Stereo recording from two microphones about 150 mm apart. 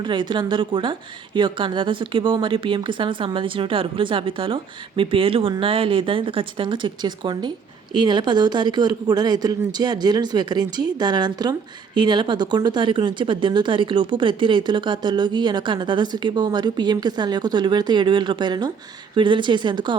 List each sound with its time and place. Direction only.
0.0 s a woman's voice: 30° right (ahead or behind)